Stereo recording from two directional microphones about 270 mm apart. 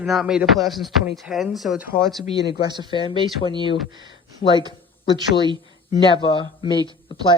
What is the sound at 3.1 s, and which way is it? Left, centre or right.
Speech, centre.